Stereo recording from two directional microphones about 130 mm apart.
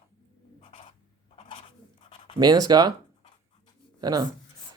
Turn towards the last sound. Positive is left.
turn(degrees=-30)  # may be behind; listen again after turning